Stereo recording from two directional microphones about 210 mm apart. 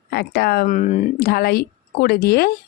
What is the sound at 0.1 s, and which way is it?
Speech, 50° left (ahead or behind).